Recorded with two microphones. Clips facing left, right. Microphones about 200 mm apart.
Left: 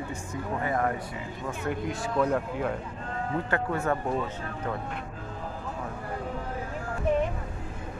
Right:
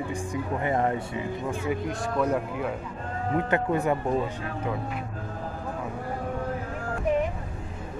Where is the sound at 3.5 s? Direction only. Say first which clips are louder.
Right 3 dB; 20° right (ahead or behind).